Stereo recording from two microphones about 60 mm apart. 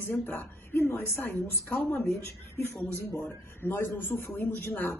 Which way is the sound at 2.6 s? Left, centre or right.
Left.